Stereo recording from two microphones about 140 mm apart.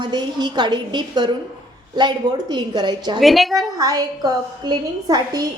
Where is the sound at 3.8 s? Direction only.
25° right (ahead or behind).